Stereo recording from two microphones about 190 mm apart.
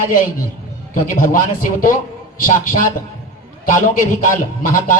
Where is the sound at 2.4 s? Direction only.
45° left (ahead or behind).